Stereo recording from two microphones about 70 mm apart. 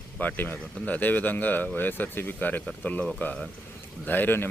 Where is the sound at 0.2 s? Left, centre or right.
Left.